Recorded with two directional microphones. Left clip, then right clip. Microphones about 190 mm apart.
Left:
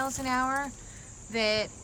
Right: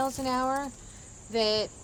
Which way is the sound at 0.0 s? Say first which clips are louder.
Right 1 dB; 20° right (ahead or behind).